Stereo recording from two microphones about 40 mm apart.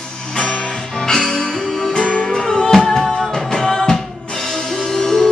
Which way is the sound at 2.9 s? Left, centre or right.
Centre.